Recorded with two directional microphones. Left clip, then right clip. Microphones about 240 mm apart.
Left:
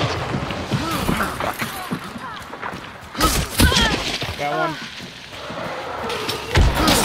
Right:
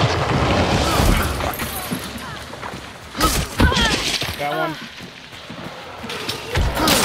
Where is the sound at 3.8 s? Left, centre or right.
Right.